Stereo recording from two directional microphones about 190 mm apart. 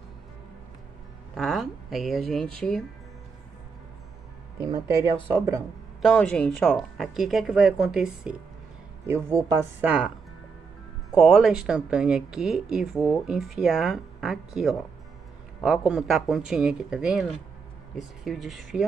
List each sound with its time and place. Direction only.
1.3 s speech: centre (ahead or behind)
5.3 s speech: 15° right (ahead or behind)
6.0 s speech: 5° left (ahead or behind)
9.0 s speech: 15° right (ahead or behind)
11.1 s speech: 5° right (ahead or behind)